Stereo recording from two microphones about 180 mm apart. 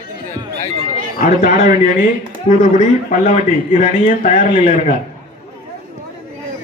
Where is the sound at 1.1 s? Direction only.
45° left (ahead or behind).